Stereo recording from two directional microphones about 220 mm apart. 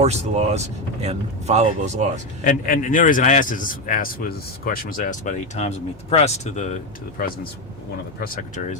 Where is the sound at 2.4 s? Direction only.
35° left (ahead or behind).